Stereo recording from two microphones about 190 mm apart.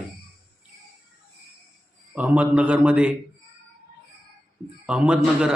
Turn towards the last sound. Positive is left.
turn(degrees=-5)  # may be behind; listen again after turning